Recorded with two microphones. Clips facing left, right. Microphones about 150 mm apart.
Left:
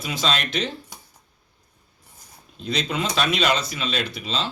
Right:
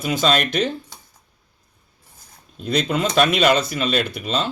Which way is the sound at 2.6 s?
50° right (ahead or behind).